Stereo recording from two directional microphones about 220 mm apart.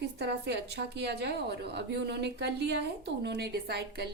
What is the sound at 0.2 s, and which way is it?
A woman's voice, 50° right (ahead or behind).